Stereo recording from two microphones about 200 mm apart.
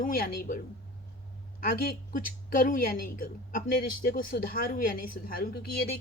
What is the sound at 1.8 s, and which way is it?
Speech, 45° left (ahead or behind).